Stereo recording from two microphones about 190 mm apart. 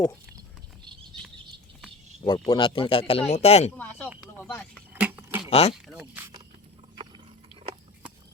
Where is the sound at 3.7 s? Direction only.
10° left (ahead or behind).